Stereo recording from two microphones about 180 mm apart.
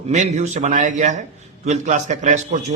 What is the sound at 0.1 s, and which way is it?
A man's voice, 40° right (ahead or behind).